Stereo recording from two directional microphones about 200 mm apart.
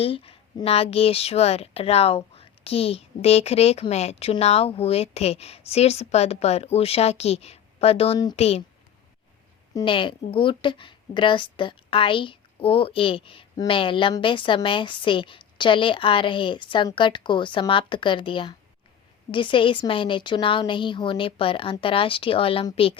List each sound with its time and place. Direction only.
0.0 s a woman's voice: 30° left (ahead or behind)
9.7 s a woman's voice: 25° left (ahead or behind)